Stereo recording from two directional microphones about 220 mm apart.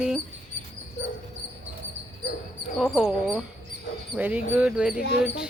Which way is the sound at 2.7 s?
Centre (ahead or behind).